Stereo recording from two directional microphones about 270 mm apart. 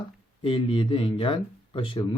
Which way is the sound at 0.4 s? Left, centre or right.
Centre.